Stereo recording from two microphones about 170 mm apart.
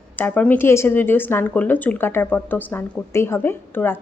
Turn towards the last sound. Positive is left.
turn(degrees=10)  # may be behind; listen again after turning